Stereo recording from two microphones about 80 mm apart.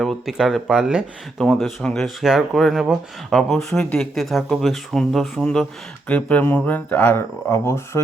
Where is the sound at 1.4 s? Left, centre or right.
Centre.